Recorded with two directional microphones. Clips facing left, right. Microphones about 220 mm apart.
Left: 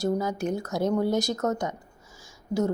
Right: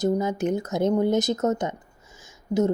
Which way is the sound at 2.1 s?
20° right (ahead or behind).